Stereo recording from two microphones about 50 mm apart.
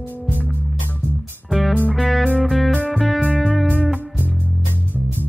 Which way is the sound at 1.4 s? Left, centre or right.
Centre.